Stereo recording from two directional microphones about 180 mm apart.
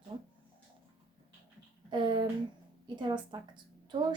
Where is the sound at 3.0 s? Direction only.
25° right (ahead or behind).